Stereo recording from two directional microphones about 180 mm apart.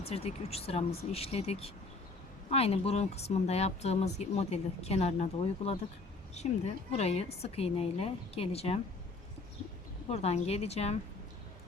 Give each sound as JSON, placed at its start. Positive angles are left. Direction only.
{"t": 0.0, "sound": "speech", "side_deg": 35}
{"t": 10.1, "sound": "speech", "side_deg": 35}